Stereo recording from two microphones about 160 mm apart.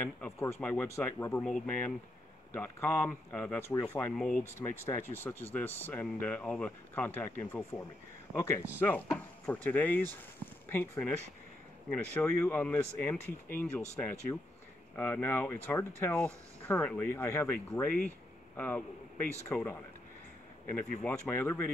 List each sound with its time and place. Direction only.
0.0 s speech: 15° left (ahead or behind)
8.7 s speech: 15° left (ahead or behind)
14.3 s speech: 20° left (ahead or behind)